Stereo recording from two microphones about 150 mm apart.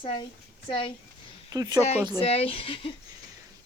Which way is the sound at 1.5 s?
25° right (ahead or behind).